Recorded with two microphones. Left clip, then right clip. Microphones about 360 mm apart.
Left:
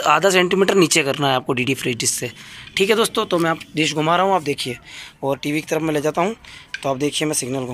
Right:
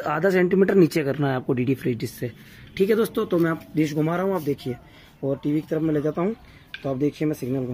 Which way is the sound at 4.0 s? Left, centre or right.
Left.